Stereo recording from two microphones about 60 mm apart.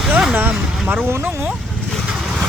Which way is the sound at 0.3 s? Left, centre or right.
Right.